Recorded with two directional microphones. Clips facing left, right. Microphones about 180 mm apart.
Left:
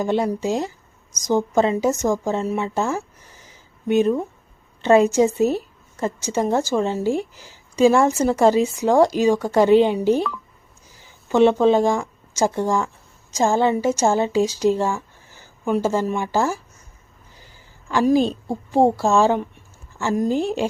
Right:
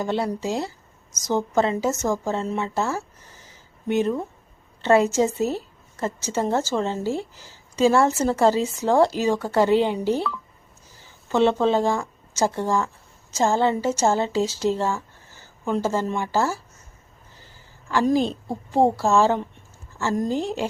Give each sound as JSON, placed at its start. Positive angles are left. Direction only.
{"t": 0.0, "sound": "a woman's voice", "side_deg": 15}